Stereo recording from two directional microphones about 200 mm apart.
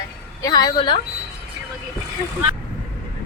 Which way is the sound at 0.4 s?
20° left (ahead or behind).